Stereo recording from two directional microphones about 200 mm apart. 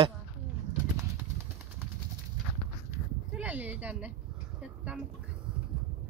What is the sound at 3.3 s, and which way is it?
Speech, 10° right (ahead or behind).